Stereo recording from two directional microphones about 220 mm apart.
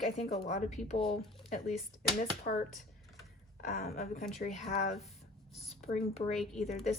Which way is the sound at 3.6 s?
40° left (ahead or behind).